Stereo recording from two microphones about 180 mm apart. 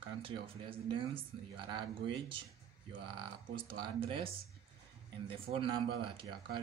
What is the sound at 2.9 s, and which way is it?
Speech, 30° right (ahead or behind).